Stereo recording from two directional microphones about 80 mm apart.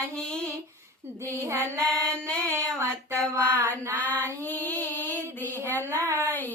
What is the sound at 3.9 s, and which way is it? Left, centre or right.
Female singing, left.